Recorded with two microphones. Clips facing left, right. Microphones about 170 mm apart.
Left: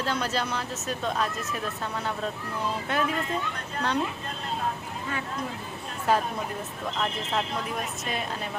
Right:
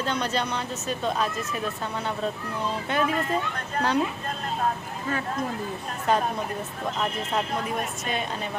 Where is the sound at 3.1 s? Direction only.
45° right (ahead or behind).